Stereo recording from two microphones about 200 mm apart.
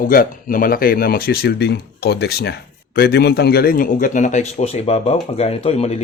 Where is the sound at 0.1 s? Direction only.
45° left (ahead or behind).